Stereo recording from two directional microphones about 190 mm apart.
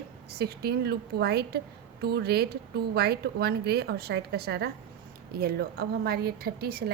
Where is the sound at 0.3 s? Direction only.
55° right (ahead or behind).